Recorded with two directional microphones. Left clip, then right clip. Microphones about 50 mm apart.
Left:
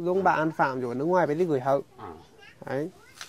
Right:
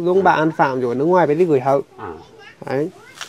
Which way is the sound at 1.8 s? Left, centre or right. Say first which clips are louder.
Right 10 dB; left.